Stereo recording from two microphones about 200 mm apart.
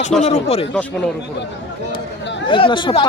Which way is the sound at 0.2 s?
30° left (ahead or behind).